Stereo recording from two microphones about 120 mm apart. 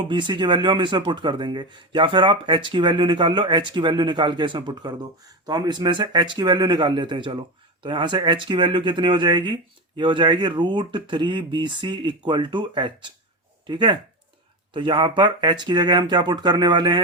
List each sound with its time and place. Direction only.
0.0 s speech: 40° right (ahead or behind)